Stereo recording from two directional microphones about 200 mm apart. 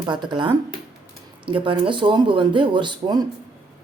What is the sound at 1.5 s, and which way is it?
Speech, 25° right (ahead or behind).